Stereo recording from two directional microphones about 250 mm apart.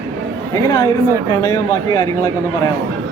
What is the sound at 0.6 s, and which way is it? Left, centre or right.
Speech, centre.